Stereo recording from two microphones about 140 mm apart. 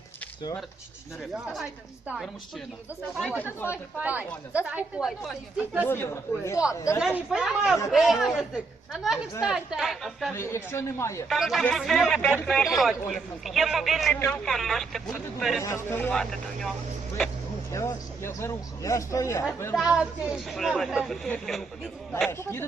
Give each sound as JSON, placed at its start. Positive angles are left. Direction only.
{"t": 2.0, "sound": "a man's voice", "side_deg": -5}
{"t": 3.7, "sound": "speech", "side_deg": -10}
{"t": 5.8, "sound": "a man's voice", "side_deg": 15}
{"t": 7.3, "sound": "a man's voice", "side_deg": -5}
{"t": 10.3, "sound": "a man's voice", "side_deg": 20}
{"t": 11.3, "sound": "a man's voice", "side_deg": 0}
{"t": 15.6, "sound": "a man's voice", "side_deg": 20}
{"t": 16.1, "sound": "a man's voice", "side_deg": 5}
{"t": 17.7, "sound": "speech", "side_deg": 20}
{"t": 19.7, "sound": "a man's voice", "side_deg": -5}
{"t": 22.3, "sound": "speech", "side_deg": 20}